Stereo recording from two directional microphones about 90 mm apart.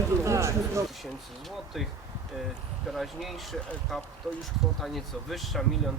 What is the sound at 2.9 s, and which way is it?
Speech, centre (ahead or behind).